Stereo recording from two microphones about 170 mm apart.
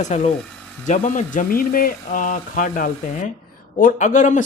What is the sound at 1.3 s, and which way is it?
Speech, 60° left (ahead or behind).